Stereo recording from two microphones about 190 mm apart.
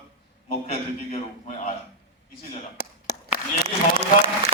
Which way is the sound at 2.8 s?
55° left (ahead or behind).